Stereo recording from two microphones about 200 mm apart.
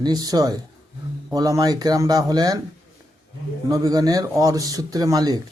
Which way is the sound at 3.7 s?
20° right (ahead or behind).